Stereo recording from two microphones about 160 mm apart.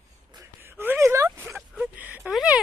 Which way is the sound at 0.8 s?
15° right (ahead or behind).